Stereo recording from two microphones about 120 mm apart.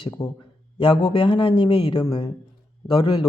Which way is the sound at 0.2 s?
35° left (ahead or behind).